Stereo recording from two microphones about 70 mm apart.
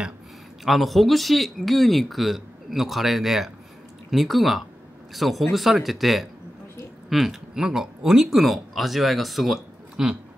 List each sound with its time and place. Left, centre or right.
0.7 s speech: centre